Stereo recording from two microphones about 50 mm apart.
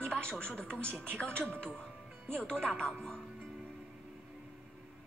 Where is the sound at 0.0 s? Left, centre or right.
Centre.